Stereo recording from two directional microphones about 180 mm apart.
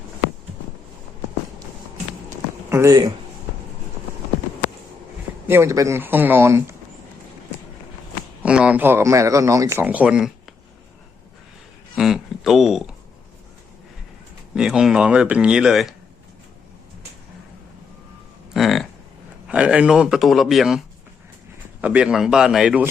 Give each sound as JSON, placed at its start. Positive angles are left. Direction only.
{"t": 2.6, "sound": "speech", "side_deg": -15}
{"t": 5.5, "sound": "speech", "side_deg": -15}
{"t": 8.4, "sound": "speech", "side_deg": -5}
{"t": 11.9, "sound": "a sound", "side_deg": 0}
{"t": 14.5, "sound": "speech", "side_deg": -5}
{"t": 18.5, "sound": "a sound", "side_deg": 0}
{"t": 19.5, "sound": "speech", "side_deg": -5}